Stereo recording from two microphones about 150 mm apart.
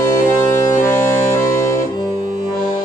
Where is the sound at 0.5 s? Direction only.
20° left (ahead or behind).